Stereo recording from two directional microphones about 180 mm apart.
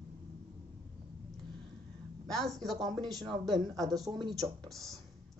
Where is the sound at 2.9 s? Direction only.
20° right (ahead or behind).